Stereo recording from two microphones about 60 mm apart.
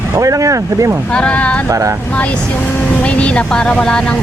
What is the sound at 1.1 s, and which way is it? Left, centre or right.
Speech, left.